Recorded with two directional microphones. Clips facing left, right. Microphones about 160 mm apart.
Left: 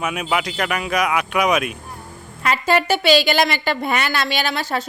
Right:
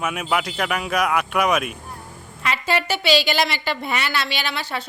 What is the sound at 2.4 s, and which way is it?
A woman's voice, 45° left (ahead or behind).